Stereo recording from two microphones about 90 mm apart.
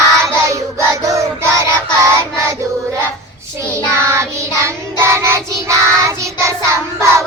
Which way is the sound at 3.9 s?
30° right (ahead or behind).